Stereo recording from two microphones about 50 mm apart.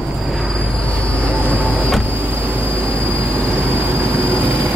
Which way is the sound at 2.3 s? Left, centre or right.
Right.